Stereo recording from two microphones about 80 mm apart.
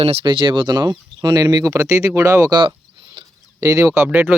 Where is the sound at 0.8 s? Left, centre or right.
Right.